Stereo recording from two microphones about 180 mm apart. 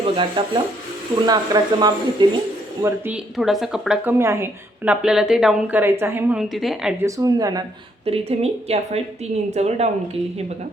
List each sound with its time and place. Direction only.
0.0 s speech: 30° right (ahead or behind)
3.3 s a woman's voice: centre (ahead or behind)
7.0 s speech: 20° right (ahead or behind)
8.0 s a woman's voice: 35° right (ahead or behind)